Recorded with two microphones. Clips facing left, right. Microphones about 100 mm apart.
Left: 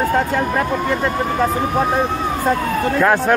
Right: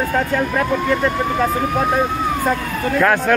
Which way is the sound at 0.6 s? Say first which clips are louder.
Right 1 dB; 25° left (ahead or behind).